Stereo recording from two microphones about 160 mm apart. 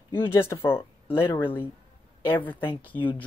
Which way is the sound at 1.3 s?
15° left (ahead or behind).